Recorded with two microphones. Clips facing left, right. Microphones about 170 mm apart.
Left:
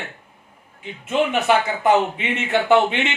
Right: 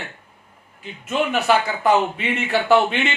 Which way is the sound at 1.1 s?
20° left (ahead or behind).